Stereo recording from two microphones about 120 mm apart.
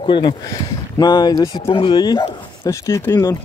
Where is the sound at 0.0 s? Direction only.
40° left (ahead or behind).